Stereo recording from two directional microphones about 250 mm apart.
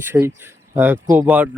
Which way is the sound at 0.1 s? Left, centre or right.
Centre.